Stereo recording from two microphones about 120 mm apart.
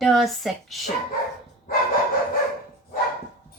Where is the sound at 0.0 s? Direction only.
Centre (ahead or behind).